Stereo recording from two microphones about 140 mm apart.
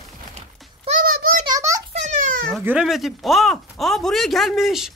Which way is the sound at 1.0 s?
90° right.